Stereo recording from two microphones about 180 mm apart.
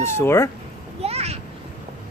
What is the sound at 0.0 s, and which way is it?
Speech, 15° left (ahead or behind).